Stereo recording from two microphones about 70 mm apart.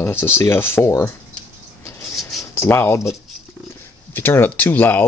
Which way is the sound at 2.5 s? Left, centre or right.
Left.